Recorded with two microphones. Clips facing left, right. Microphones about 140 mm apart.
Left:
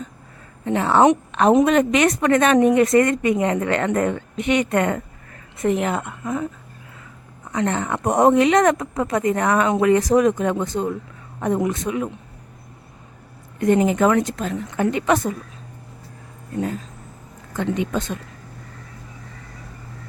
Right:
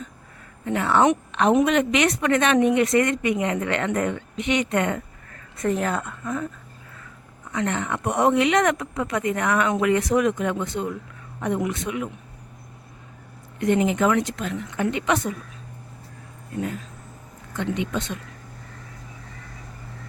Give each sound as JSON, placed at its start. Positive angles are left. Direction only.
{"t": 0.6, "sound": "a woman's voice", "side_deg": 30}
{"t": 5.6, "sound": "a woman's voice", "side_deg": 20}
{"t": 7.5, "sound": "a woman's voice", "side_deg": 35}
{"t": 13.6, "sound": "a woman's voice", "side_deg": 40}
{"t": 17.6, "sound": "a woman's voice", "side_deg": 40}